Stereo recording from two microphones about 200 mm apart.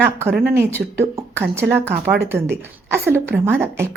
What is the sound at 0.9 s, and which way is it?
A woman's voice, 10° right (ahead or behind).